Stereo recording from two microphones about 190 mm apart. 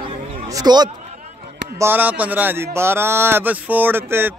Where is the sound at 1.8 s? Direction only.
10° right (ahead or behind).